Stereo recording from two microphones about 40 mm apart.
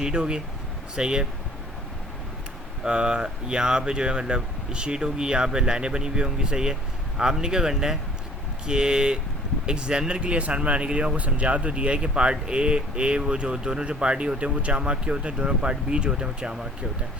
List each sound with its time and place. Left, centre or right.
0.0 s speech: right
2.8 s speech: right